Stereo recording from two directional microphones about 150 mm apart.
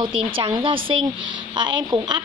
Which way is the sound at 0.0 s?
30° right (ahead or behind).